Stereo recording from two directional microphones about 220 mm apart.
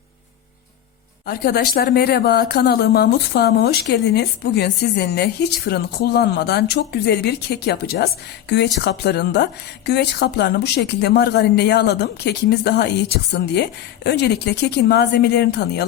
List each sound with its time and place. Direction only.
1.3 s speech: 45° left (ahead or behind)